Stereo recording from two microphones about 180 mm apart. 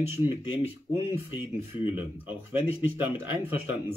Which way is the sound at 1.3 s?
10° right (ahead or behind).